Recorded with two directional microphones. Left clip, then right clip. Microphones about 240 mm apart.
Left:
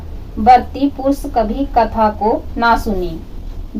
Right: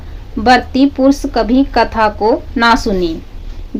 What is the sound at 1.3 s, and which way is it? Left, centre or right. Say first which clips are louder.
A woman's voice: right 3 dB; right.